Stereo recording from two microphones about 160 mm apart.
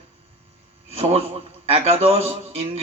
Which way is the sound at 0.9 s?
40° right (ahead or behind).